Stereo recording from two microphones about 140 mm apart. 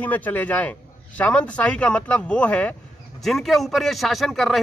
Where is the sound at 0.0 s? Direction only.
10° left (ahead or behind).